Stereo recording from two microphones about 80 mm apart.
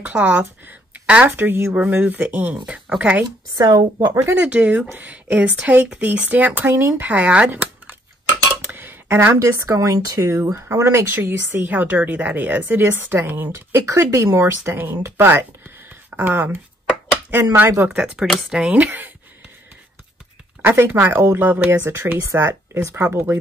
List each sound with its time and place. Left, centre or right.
0.0 s speech: centre
3.5 s speech: right
4.1 s speech: right
4.5 s speech: centre; by 10.2 s right
10.2 s speech: right
17.6 s speech: right
17.8 s speech: centre
18.2 s speech: centre
18.5 s speech: centre
20.6 s speech: right